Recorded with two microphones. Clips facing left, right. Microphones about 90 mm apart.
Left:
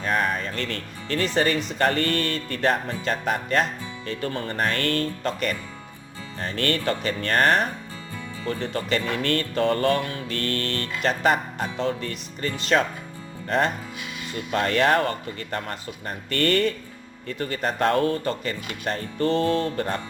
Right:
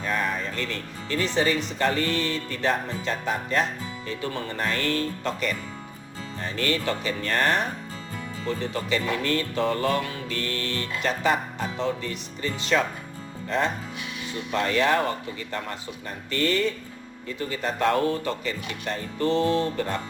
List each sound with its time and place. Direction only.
0.0 s speech: 60° left (ahead or behind)
6.6 s speech: 55° left (ahead or behind)
14.5 s speech: 55° left (ahead or behind)